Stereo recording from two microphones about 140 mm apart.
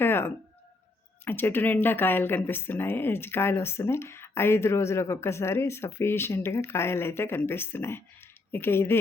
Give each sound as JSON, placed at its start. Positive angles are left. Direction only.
{"t": 0.0, "sound": "music", "side_deg": 15}
{"t": 1.2, "sound": "speech", "side_deg": 15}